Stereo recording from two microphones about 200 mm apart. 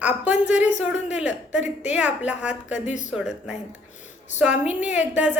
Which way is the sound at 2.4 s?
35° left (ahead or behind).